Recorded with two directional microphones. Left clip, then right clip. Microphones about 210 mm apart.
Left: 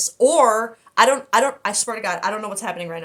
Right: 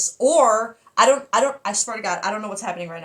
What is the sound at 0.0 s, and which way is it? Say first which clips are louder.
A woman's voice: left 1 dB; 40° left (ahead or behind).